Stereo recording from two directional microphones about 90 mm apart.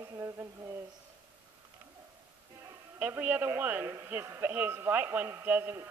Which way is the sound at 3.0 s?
20° right (ahead or behind).